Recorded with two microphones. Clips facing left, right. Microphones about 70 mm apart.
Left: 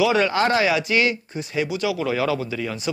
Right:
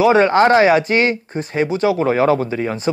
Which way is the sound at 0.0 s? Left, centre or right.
Right.